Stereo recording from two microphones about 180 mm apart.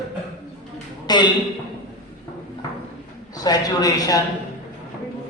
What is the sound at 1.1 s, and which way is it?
Speech, 25° left (ahead or behind).